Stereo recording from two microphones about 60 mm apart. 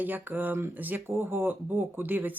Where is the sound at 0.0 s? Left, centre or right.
Right.